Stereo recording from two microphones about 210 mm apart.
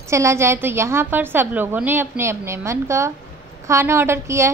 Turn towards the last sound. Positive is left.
turn(degrees=-15)  # may be behind; listen again after turning